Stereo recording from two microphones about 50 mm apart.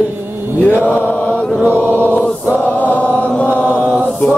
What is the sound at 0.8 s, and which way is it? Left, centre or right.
Chant, left.